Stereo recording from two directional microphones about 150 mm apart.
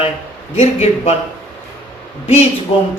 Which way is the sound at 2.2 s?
40° left (ahead or behind).